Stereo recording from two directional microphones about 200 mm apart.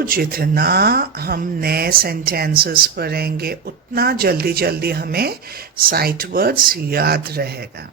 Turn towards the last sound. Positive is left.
turn(degrees=-50)  # may be behind; listen again after turning